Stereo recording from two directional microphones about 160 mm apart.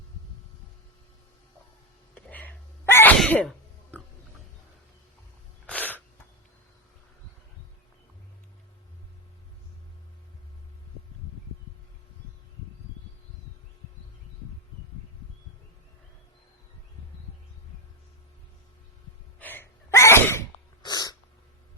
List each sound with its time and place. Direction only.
2.1 s sneeze: 10° left (ahead or behind)
5.6 s sneeze: 10° left (ahead or behind)
19.4 s sneeze: 10° left (ahead or behind)
20.8 s sneeze: 25° left (ahead or behind)